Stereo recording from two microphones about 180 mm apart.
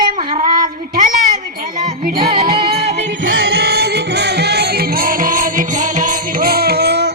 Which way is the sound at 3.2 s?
75° right (ahead or behind).